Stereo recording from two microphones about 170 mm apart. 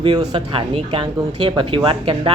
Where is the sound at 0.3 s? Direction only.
30° right (ahead or behind).